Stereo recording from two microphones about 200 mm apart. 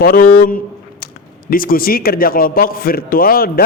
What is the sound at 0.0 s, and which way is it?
A man's voice, 45° left (ahead or behind).